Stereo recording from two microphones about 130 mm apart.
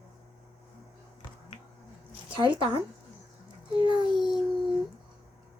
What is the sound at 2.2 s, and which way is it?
Speech, 40° right (ahead or behind).